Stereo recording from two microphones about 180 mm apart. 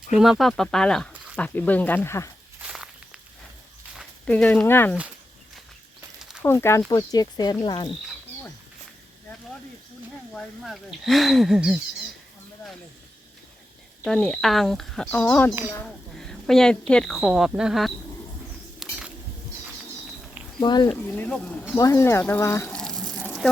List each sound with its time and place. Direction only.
0.1 s speech: centre (ahead or behind); by 2.3 s 15° left (ahead or behind)
2.6 s walk: 5° right (ahead or behind)
4.3 s speech: 10° left (ahead or behind)
6.4 s speech: 15° left (ahead or behind)
10.3 s speech: centre (ahead or behind)
14.0 s a woman's voice: 5° left (ahead or behind)
18.8 s a sound: 5° right (ahead or behind)
20.6 s speech: 25° left (ahead or behind)
20.9 s speech: 5° left (ahead or behind)
22.8 s a sound: 5° left (ahead or behind)